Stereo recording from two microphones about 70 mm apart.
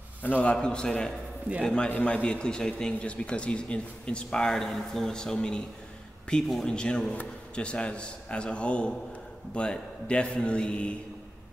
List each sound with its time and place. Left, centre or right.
0.2 s a man's voice: left
1.9 s a man's voice: left